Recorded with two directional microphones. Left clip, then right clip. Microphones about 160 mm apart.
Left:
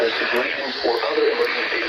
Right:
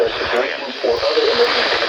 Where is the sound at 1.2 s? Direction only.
90° right.